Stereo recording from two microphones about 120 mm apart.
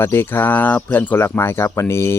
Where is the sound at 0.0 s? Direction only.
20° left (ahead or behind).